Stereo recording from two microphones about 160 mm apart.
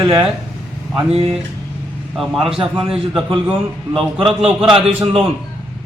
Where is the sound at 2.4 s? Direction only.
35° right (ahead or behind).